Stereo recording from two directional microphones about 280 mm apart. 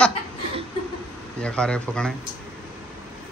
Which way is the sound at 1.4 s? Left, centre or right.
Centre.